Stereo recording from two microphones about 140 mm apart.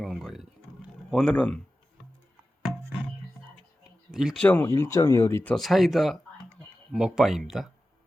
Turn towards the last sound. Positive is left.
turn(degrees=0)  # may be behind; listen again after turning